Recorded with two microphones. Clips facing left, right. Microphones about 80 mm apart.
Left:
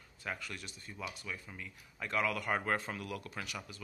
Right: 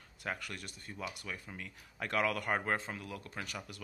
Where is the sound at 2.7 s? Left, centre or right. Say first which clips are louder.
Left 1 dB; right.